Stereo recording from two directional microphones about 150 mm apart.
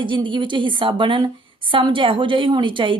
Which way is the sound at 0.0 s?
35° right (ahead or behind).